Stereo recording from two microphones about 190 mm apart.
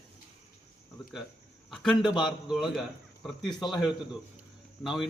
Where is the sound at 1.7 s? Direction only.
Centre (ahead or behind).